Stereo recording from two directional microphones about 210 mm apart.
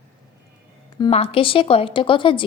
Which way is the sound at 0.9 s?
25° left (ahead or behind).